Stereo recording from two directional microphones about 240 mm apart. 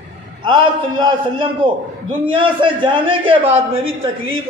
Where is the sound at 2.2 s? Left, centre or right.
Right.